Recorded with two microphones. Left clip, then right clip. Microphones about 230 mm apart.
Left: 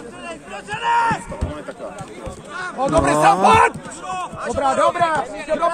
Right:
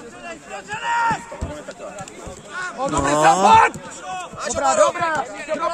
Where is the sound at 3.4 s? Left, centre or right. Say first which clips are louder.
Even; left.